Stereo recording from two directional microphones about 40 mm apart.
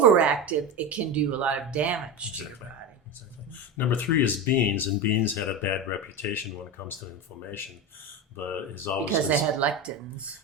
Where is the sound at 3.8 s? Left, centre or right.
Left.